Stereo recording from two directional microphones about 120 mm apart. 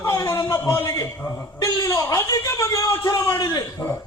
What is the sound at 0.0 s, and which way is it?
A man's voice, 25° left (ahead or behind).